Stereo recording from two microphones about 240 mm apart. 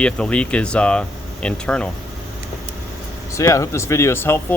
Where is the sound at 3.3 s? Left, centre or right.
Centre.